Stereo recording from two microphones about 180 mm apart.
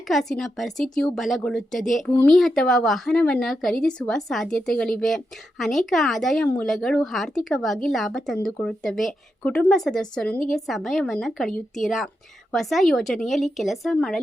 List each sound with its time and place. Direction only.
0.1 s a woman's voice: centre (ahead or behind)